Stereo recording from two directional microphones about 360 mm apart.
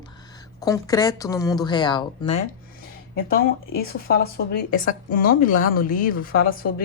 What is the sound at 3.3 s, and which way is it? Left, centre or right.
Speech, left.